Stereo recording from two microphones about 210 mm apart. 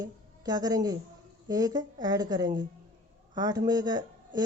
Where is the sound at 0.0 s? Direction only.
20° right (ahead or behind).